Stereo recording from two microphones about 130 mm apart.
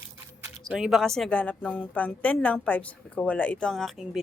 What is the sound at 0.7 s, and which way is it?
Speech, 5° right (ahead or behind).